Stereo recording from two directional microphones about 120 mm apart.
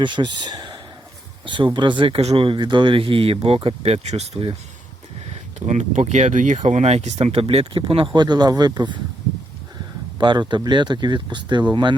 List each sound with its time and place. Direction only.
0.0 s speech: 40° right (ahead or behind); by 4.3 s 65° right (ahead or behind)
5.3 s speech: 70° right (ahead or behind); by 9.0 s 35° right (ahead or behind)
10.2 s speech: 40° right (ahead or behind)